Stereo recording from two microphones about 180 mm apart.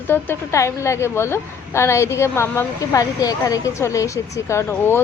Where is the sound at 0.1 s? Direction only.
15° left (ahead or behind).